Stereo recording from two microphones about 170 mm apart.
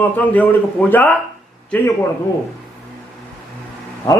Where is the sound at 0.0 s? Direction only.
10° left (ahead or behind).